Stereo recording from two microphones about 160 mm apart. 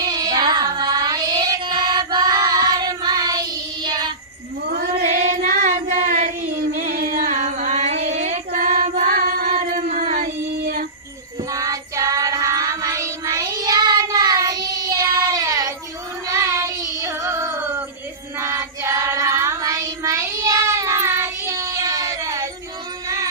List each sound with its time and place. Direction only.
0.0 s child singing: 25° right (ahead or behind)
4.7 s child singing: 70° right (ahead or behind)
5.6 s child singing: 50° right (ahead or behind)
6.9 s music: 70° right (ahead or behind)
7.3 s music: 50° right (ahead or behind)
8.2 s singing: 50° right (ahead or behind); by 10.8 s 65° right (ahead or behind)
11.5 s child singing: 20° right (ahead or behind)
16.2 s music: 20° right (ahead or behind)
18.3 s child singing: 15° right (ahead or behind)
23.0 s music: 20° right (ahead or behind)